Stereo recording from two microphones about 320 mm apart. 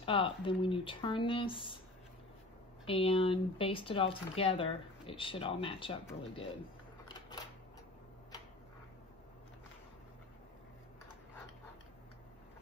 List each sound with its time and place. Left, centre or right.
0.0 s speech: centre
2.8 s speech: centre